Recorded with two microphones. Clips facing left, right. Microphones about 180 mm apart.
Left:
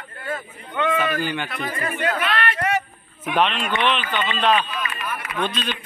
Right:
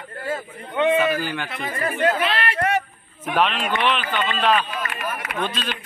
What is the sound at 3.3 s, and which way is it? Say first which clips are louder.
A man's voice: even; 5° right (ahead or behind).